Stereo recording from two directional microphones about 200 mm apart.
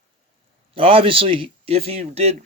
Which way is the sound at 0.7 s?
25° right (ahead or behind).